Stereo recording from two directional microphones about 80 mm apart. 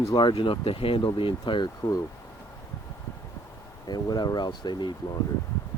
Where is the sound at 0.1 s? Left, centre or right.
Left.